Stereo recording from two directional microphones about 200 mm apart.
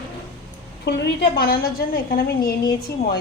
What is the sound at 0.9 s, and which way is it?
A woman's voice, 60° left (ahead or behind).